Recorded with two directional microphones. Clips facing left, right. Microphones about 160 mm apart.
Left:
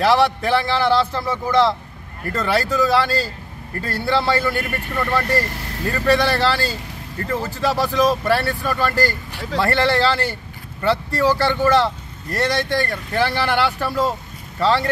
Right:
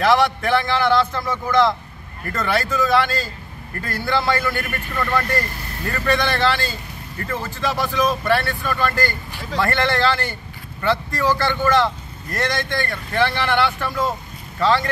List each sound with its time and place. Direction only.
0.0 s speech: 30° left (ahead or behind)